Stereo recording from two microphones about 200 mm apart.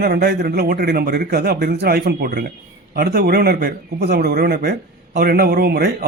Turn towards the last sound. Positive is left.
turn(degrees=-50)  # may be behind; listen again after turning